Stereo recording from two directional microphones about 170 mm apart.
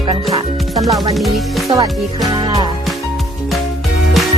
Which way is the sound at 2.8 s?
Centre (ahead or behind).